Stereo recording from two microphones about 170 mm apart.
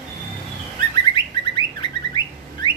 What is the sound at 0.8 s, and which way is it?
Bird, 25° left (ahead or behind).